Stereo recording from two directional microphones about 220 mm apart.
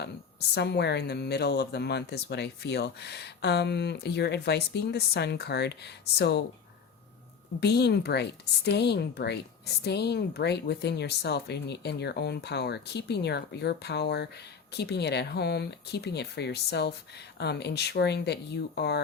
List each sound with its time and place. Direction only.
0.0 s a woman's voice: 50° left (ahead or behind)
7.6 s a woman's voice: 50° left (ahead or behind)